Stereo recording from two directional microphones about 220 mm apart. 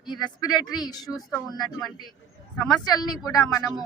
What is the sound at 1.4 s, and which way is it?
Speech, 15° left (ahead or behind).